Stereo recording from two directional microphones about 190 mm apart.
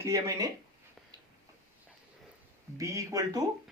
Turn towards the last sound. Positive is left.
turn(degrees=-15)  # may be behind; listen again after turning